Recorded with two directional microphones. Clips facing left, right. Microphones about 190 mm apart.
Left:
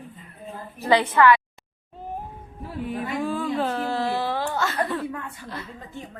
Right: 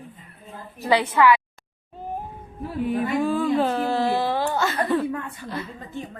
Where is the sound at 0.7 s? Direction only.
10° right (ahead or behind).